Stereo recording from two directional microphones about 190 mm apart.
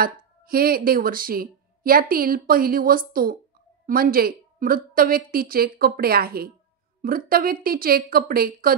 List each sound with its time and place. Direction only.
0.0 s speech: 50° right (ahead or behind)